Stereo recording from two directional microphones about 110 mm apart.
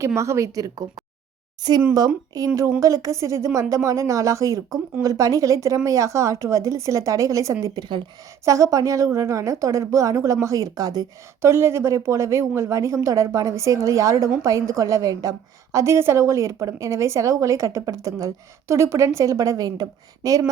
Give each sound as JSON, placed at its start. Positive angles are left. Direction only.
{"t": 0.0, "sound": "a woman's voice", "side_deg": -25}
{"t": 2.8, "sound": "a woman's voice", "side_deg": -30}
{"t": 7.6, "sound": "speech", "side_deg": -40}
{"t": 8.4, "sound": "a woman's voice", "side_deg": -30}
{"t": 11.4, "sound": "a woman's voice", "side_deg": -25}